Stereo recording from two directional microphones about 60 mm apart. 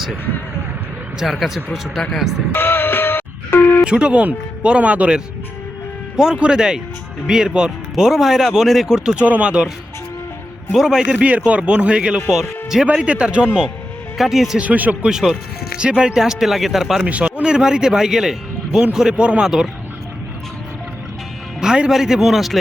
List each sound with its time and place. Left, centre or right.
1.2 s speech: centre
2.5 s music: left
3.8 s speech: centre
9.2 s speech: right
10.7 s speech: centre
11.2 s speech: right
12.3 s speech: centre
12.9 s speech: centre
14.6 s speech: right
15.0 s speech: centre
17.1 s speech: centre
21.6 s speech: centre